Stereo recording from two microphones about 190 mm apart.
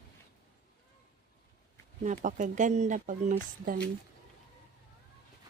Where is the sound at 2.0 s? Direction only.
40° right (ahead or behind).